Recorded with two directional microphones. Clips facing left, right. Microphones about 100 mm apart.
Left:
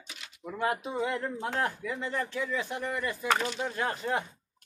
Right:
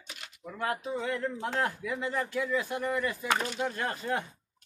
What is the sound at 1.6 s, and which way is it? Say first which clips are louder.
A man's voice: right 1 dB; centre (ahead or behind).